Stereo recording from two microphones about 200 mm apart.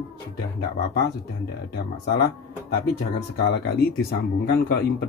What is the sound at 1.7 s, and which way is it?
Speech, 55° left (ahead or behind).